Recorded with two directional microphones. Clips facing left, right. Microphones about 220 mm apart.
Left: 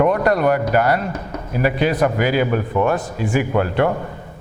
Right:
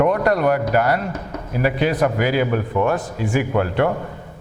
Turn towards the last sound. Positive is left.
turn(degrees=15)  # may be behind; listen again after turning